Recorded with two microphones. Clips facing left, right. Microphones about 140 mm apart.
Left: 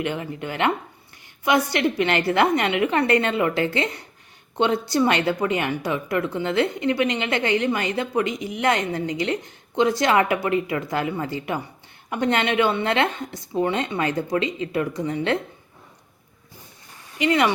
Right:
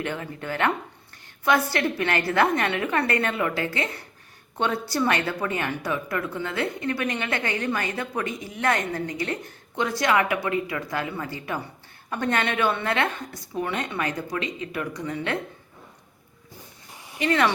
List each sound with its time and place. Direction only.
0.0 s a woman's voice: 15° left (ahead or behind)
16.9 s a sound: 15° right (ahead or behind)
17.2 s speech: 15° left (ahead or behind)